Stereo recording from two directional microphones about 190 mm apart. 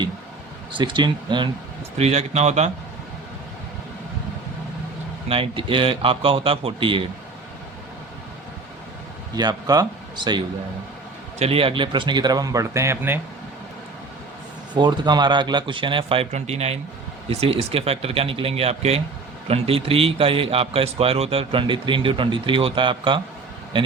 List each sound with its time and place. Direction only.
0.7 s a man's voice: 25° right (ahead or behind)
2.0 s speech: 35° right (ahead or behind)
5.3 s a man's voice: 30° right (ahead or behind)
9.3 s a man's voice: 20° right (ahead or behind)
14.7 s a man's voice: 25° right (ahead or behind)